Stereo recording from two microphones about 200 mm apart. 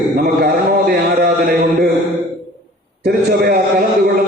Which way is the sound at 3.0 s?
50° right (ahead or behind).